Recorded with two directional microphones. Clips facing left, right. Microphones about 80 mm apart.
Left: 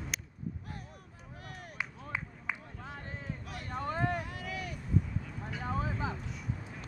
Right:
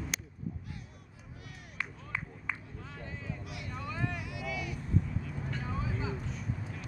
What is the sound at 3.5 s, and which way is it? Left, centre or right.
Vehicle, left.